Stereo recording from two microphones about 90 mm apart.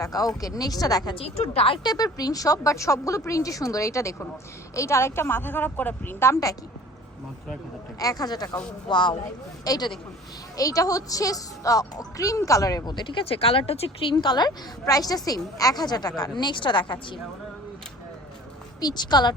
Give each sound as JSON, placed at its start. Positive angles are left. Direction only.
{"t": 0.0, "sound": "a woman's voice", "side_deg": 45}
{"t": 1.1, "sound": "speech", "side_deg": 90}
{"t": 1.8, "sound": "a woman's voice", "side_deg": 45}
{"t": 7.9, "sound": "a woman's voice", "side_deg": 45}
{"t": 8.9, "sound": "speech", "side_deg": 60}
{"t": 9.6, "sound": "a woman's voice", "side_deg": 45}
{"t": 14.2, "sound": "a woman's voice", "side_deg": 55}
{"t": 16.3, "sound": "speech", "side_deg": 60}
{"t": 18.8, "sound": "a woman's voice", "side_deg": 50}